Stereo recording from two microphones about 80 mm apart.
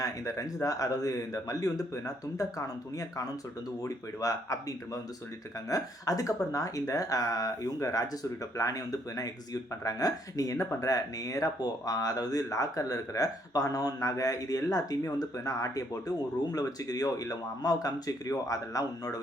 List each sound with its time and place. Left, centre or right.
0.0 s speech: left
5.6 s speech: left